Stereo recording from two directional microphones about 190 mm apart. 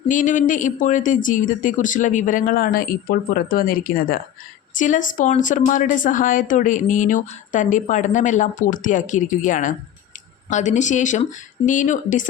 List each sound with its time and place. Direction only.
0.1 s a woman's voice: 45° left (ahead or behind)